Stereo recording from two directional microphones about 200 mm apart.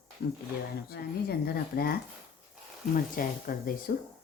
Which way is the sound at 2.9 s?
45° left (ahead or behind).